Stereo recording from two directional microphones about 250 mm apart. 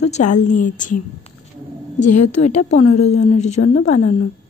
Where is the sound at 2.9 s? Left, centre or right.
Left.